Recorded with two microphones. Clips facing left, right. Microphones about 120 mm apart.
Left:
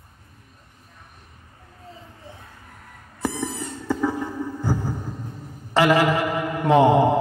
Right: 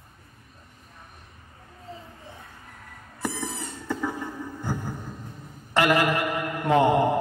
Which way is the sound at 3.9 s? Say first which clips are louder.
Left 6 dB; 15° left (ahead or behind).